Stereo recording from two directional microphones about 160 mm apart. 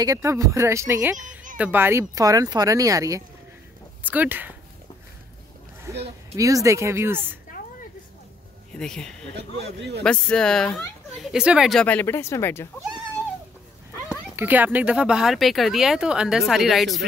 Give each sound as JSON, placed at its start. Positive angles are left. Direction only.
{"t": 0.0, "sound": "speech", "side_deg": -20}
{"t": 5.9, "sound": "a sound", "side_deg": -15}
{"t": 6.3, "sound": "speech", "side_deg": -20}
{"t": 8.7, "sound": "speech", "side_deg": 5}
{"t": 14.3, "sound": "speech", "side_deg": -10}